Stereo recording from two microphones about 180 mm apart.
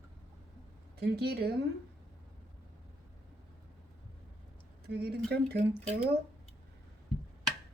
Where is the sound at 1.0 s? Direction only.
60° right (ahead or behind).